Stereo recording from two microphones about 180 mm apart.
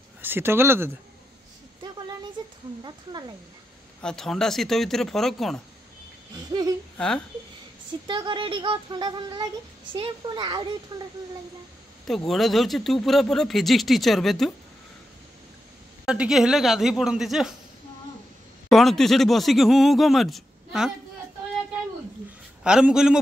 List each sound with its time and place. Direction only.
0.2 s speech: 10° right (ahead or behind)
2.8 s speech: 25° right (ahead or behind)
4.0 s speech: 5° left (ahead or behind)
7.0 s speech: 5° left (ahead or behind)
8.1 s speech: 25° right (ahead or behind)
12.1 s speech: centre (ahead or behind)
16.1 s speech: 5° right (ahead or behind)
18.7 s speech: centre (ahead or behind)
22.6 s speech: 5° right (ahead or behind)